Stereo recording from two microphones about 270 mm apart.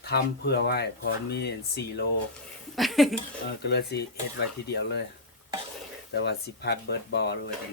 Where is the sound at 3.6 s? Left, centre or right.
Left.